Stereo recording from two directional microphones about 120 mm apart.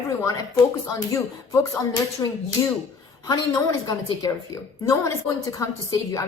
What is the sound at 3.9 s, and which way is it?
A woman's voice, 35° left (ahead or behind).